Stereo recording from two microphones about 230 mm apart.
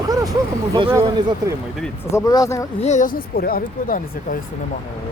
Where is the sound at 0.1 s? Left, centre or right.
Centre.